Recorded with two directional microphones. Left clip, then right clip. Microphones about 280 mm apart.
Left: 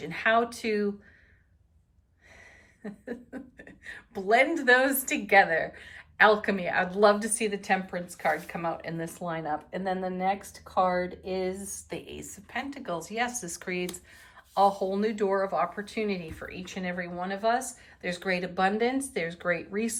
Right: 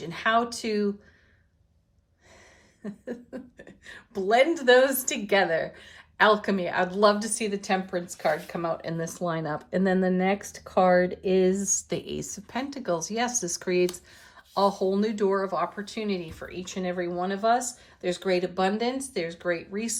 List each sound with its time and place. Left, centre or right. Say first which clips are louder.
0.0 s speech: even; centre
2.8 s speech: right 2 dB; centre
10.6 s speech: right 6 dB; right; by 20.0 s centre